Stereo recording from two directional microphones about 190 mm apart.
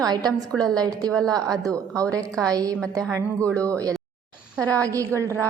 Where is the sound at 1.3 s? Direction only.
20° right (ahead or behind).